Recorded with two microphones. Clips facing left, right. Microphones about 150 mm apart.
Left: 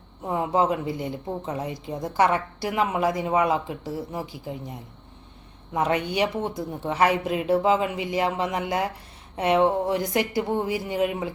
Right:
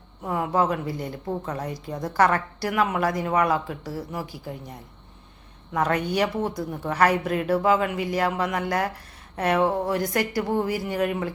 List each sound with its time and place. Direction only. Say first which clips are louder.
0.3 s a woman's voice: left 1 dB; 20° left (ahead or behind)
5.7 s a woman's voice: even; 20° left (ahead or behind)